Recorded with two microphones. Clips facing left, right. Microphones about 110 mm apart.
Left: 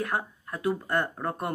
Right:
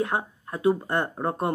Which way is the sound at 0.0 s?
20° right (ahead or behind).